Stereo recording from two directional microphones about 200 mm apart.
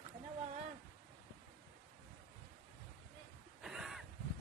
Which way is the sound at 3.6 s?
Centre (ahead or behind).